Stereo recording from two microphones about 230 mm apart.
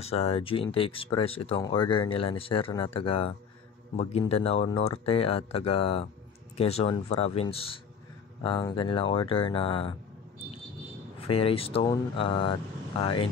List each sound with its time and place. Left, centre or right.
0.0 s speech: left
11.1 s speech: left